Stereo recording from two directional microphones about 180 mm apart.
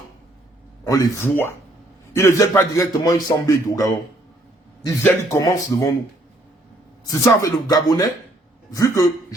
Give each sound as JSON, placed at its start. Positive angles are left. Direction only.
{"t": 0.9, "sound": "a man's voice", "side_deg": 20}
{"t": 5.0, "sound": "speech", "side_deg": 15}
{"t": 7.0, "sound": "a man's voice", "side_deg": 20}